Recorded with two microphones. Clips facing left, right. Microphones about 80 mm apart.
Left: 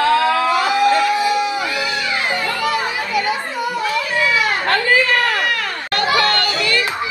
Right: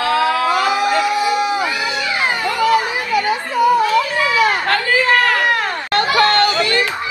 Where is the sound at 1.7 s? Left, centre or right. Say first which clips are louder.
Right 1 dB; right.